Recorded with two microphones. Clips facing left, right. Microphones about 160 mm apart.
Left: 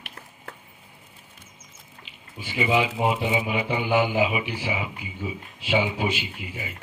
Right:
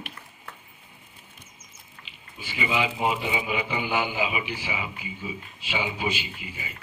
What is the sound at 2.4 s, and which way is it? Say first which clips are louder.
Speech: left 4 dB; 50° left (ahead or behind).